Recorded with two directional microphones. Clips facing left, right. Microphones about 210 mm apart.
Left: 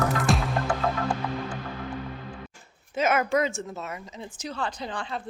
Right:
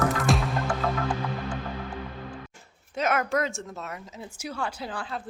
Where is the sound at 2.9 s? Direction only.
Centre (ahead or behind).